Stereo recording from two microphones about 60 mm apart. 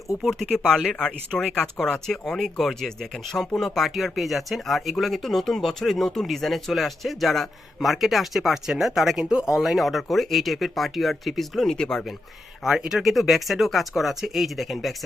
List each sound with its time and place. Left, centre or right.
0.2 s speech: centre
12.6 s speech: centre